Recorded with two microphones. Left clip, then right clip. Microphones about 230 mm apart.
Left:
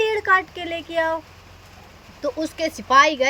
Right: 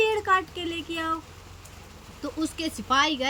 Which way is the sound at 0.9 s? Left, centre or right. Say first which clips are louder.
Left 11 dB; centre.